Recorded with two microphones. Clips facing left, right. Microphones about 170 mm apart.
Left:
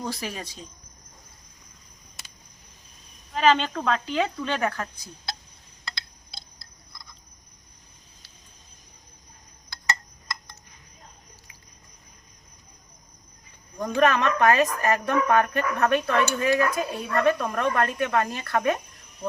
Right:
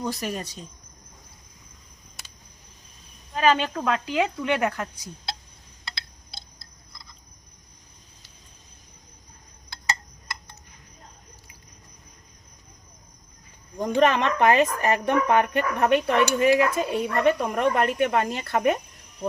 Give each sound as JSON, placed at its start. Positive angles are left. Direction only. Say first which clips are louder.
{"t": 0.0, "sound": "speech", "louder": "right 3 dB", "side_deg": 0}
{"t": 3.3, "sound": "speech", "louder": "even", "side_deg": -5}
{"t": 13.7, "sound": "speech", "louder": "right 1 dB", "side_deg": -25}